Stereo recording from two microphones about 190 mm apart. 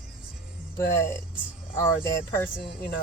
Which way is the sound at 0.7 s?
15° left (ahead or behind).